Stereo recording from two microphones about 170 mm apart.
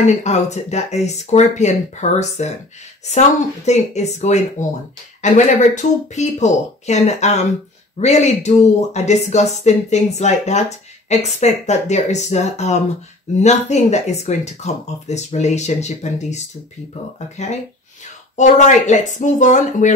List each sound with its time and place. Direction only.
0.0 s speech: 40° left (ahead or behind)